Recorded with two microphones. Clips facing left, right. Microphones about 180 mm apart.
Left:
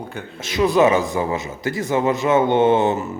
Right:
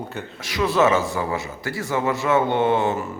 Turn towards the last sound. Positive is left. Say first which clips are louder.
# left 4 dB
turn(degrees=20)  # may be behind; listen again after turning